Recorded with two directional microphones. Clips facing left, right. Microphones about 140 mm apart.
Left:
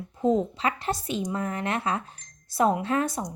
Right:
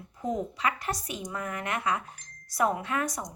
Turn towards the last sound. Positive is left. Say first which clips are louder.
# left 5 dB
turn(degrees=30)  # may be behind; listen again after turning